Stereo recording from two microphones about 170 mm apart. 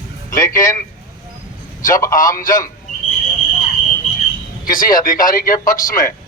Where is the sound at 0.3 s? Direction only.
15° left (ahead or behind).